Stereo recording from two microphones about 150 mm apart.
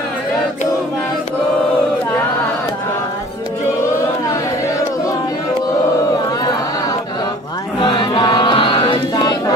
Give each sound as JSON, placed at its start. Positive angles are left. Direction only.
{"t": 7.8, "sound": "chant", "side_deg": 25}